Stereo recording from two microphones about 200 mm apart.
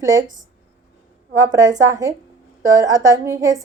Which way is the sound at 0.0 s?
20° right (ahead or behind).